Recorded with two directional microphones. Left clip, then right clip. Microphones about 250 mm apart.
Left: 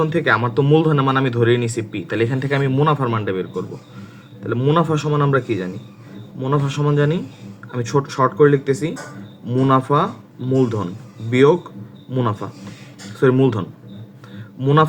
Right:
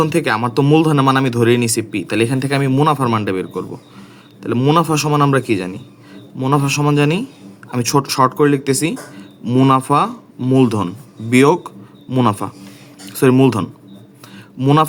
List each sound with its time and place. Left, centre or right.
0.0 s speech: right